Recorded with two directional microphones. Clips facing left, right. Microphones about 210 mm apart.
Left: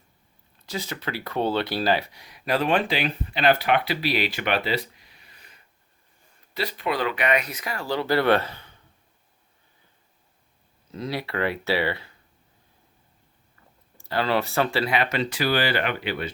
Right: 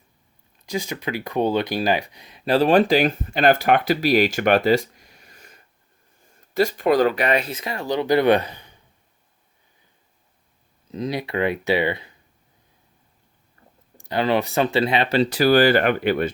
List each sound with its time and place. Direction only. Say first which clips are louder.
0.6 s speech: right 5 dB; 15° right (ahead or behind)
10.9 s speech: right 4 dB; 20° right (ahead or behind)
14.0 s speech: right 3 dB; 20° right (ahead or behind); by 16.3 s 50° right (ahead or behind)